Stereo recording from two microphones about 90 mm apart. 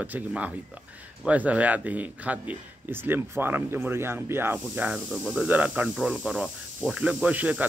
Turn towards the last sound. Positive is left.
turn(degrees=-20)  # may be behind; listen again after turning